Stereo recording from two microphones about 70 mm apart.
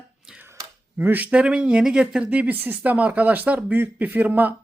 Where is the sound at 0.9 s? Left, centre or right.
Right.